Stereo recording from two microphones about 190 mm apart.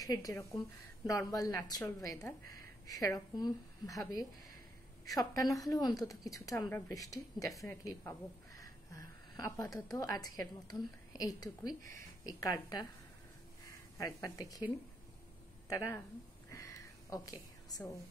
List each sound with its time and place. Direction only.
0.0 s a woman's voice: 20° left (ahead or behind)
13.9 s a woman's voice: 15° left (ahead or behind)
15.7 s speech: 15° left (ahead or behind)
16.4 s a sound: 15° left (ahead or behind)